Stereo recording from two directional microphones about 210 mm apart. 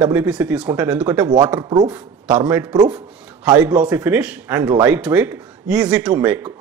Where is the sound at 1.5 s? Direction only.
20° right (ahead or behind).